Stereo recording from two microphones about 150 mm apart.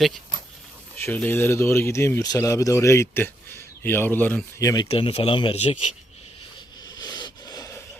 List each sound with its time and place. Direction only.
0.9 s speech: 15° left (ahead or behind)
4.6 s speech: 25° left (ahead or behind)
4.9 s speech: 40° left (ahead or behind)
6.8 s a sound: 25° left (ahead or behind)